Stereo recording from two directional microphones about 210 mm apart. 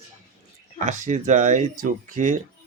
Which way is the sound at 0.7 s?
35° right (ahead or behind).